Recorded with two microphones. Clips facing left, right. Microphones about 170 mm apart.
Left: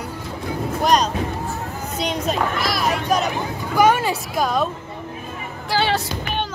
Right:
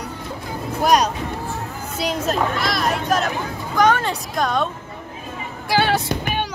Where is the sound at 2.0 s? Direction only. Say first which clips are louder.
Right 1 dB; 5° right (ahead or behind).